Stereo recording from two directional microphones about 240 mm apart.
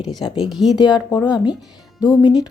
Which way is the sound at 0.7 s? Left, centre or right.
Centre.